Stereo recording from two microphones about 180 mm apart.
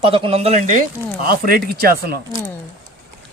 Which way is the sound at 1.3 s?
55° right (ahead or behind).